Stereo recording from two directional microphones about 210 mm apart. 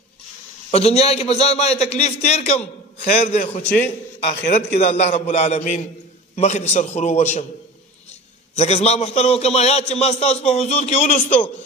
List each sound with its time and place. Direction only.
0.7 s a man's voice: 30° left (ahead or behind)
11.2 s a man's voice: 10° left (ahead or behind)